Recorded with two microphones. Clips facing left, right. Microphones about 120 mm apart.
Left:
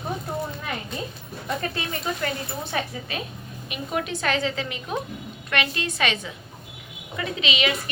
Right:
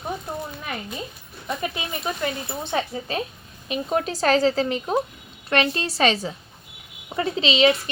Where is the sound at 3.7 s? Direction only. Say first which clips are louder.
Right 4 dB; 35° right (ahead or behind).